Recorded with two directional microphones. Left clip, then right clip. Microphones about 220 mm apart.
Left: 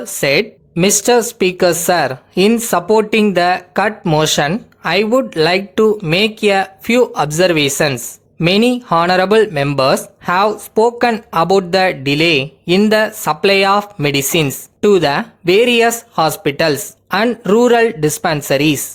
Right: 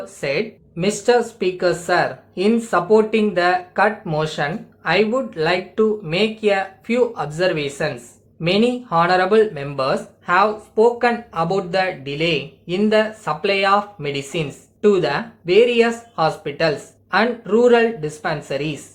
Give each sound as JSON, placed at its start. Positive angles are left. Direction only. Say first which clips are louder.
{"t": 0.0, "sound": "speech", "louder": "left 8 dB", "side_deg": 50}